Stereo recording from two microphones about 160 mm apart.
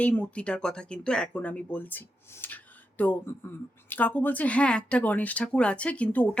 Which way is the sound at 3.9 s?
10° left (ahead or behind).